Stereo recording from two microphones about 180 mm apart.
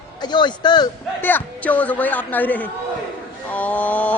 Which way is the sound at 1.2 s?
10° left (ahead or behind).